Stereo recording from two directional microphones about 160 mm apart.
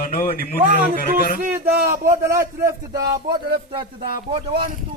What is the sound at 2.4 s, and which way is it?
Speech, 20° right (ahead or behind).